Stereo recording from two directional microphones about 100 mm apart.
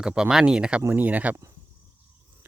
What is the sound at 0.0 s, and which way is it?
Speech, 5° right (ahead or behind).